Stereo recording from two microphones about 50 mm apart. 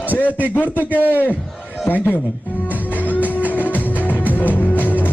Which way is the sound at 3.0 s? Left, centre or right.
Left.